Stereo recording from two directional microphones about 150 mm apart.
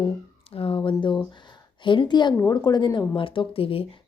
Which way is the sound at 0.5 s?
40° left (ahead or behind).